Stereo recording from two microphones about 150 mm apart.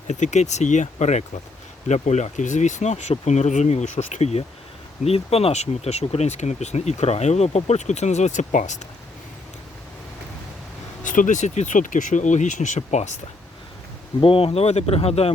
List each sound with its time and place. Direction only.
0.1 s speech: 50° left (ahead or behind)
11.0 s speech: 60° left (ahead or behind)
14.2 s speech: 35° left (ahead or behind)